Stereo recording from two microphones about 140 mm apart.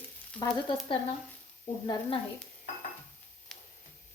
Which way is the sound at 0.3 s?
35° left (ahead or behind).